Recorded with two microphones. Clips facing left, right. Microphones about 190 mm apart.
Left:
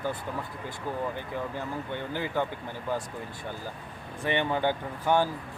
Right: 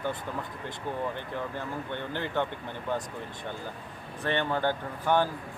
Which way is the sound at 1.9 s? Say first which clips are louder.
Left 1 dB; 10° left (ahead or behind).